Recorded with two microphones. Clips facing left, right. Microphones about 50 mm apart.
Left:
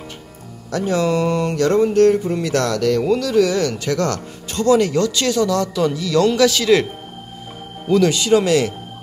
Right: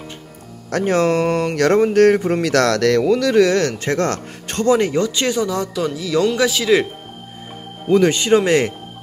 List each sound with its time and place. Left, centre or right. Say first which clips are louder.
0.7 s speech: right 2 dB; right
2.0 s speech: right 1 dB; right
3.2 s speech: right 2 dB; right
3.7 s speech: right 1 dB; right
4.6 s speech: left 1 dB; right
7.9 s speech: right 1 dB; right